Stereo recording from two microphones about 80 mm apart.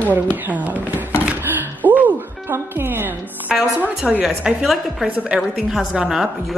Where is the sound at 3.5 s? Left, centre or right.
Centre.